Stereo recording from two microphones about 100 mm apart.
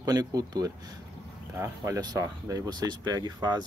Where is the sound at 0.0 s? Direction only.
40° right (ahead or behind).